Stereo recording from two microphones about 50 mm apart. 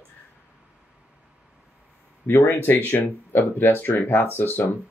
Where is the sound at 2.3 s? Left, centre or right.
Left.